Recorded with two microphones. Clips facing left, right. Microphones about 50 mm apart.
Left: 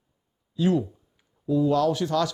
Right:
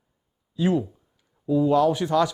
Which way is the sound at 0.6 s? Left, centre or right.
Centre.